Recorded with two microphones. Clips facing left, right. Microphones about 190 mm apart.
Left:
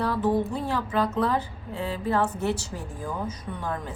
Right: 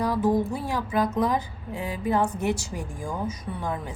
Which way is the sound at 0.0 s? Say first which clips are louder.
Right 1 dB; 10° right (ahead or behind).